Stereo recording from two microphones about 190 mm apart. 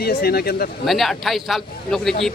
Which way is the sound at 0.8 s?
Centre (ahead or behind).